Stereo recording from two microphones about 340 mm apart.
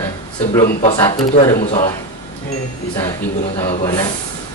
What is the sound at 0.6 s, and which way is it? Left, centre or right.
Speech, centre.